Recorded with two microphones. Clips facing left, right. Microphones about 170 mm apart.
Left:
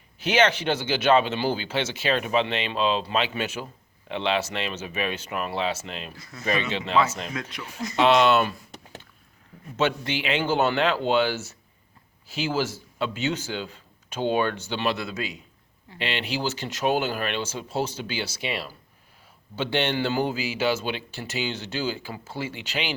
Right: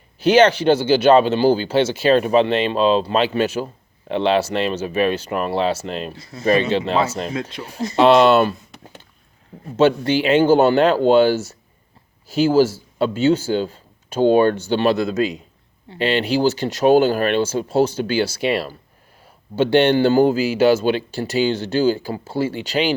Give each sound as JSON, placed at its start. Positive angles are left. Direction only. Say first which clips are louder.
{"t": 0.2, "sound": "speech", "louder": "right 9 dB", "side_deg": -35}
{"t": 9.6, "sound": "speech", "louder": "right 10 dB", "side_deg": -35}